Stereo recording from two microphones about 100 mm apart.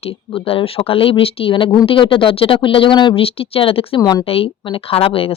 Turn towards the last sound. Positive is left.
turn(degrees=70)  # may be behind; listen again after turning